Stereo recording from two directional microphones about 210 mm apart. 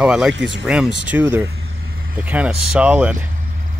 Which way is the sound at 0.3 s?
60° right (ahead or behind).